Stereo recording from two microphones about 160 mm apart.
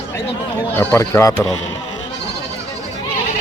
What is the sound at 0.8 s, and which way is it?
Speech, 15° left (ahead or behind).